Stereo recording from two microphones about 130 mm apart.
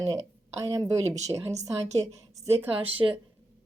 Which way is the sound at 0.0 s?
25° right (ahead or behind).